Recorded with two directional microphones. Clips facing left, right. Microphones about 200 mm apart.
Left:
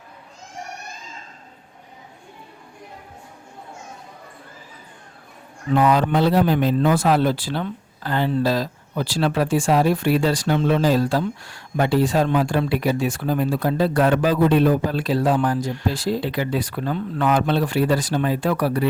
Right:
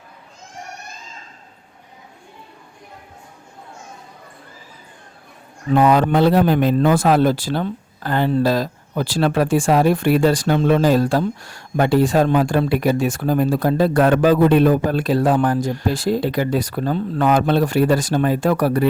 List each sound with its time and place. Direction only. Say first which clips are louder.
5.7 s speech: right 3 dB; 55° right (ahead or behind)